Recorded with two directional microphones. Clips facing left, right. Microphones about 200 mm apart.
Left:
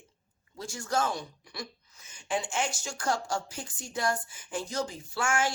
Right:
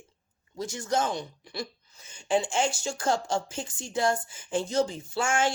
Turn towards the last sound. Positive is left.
turn(degrees=-25)  # may be behind; listen again after turning